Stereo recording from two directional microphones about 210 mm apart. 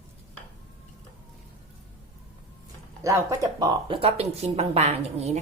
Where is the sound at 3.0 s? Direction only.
15° right (ahead or behind); by 5.3 s 30° right (ahead or behind).